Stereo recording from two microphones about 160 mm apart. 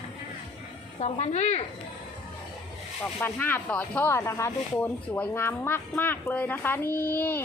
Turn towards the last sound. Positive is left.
turn(degrees=10)  # may be behind; listen again after turning